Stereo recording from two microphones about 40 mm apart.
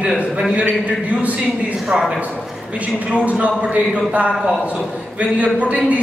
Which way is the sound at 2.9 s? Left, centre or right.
Right.